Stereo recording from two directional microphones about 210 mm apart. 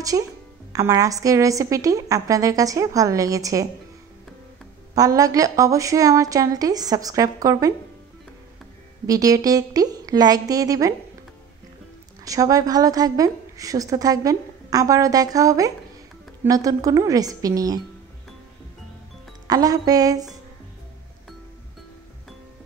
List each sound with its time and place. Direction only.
0.1 s a woman's voice: 15° right (ahead or behind)
4.9 s a woman's voice: 15° right (ahead or behind)
9.0 s a woman's voice: 15° right (ahead or behind)
12.3 s a woman's voice: 15° right (ahead or behind)
19.4 s a woman's voice: 15° right (ahead or behind)